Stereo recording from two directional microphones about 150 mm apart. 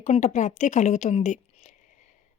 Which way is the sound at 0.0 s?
50° left (ahead or behind).